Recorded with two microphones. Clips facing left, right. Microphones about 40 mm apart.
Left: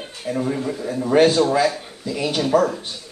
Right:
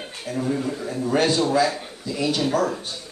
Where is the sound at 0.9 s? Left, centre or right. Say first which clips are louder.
Left 6 dB; left.